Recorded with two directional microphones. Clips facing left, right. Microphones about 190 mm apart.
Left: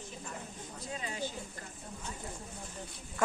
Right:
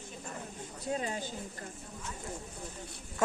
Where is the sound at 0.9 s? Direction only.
45° right (ahead or behind).